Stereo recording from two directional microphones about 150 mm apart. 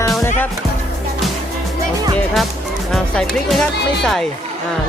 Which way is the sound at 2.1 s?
Centre (ahead or behind).